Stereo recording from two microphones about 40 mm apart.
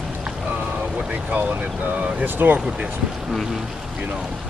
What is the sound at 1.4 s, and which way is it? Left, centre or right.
Speech, right.